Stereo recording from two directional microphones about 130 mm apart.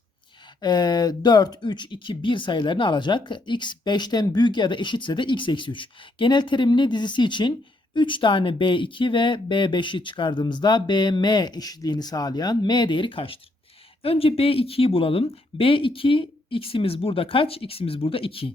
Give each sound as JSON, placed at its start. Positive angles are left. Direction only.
{"t": 0.6, "sound": "speech", "side_deg": 35}